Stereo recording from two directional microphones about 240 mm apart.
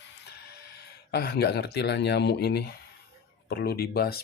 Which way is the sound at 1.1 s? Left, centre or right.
Left.